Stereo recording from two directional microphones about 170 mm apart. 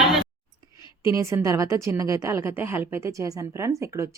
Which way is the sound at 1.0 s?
15° right (ahead or behind).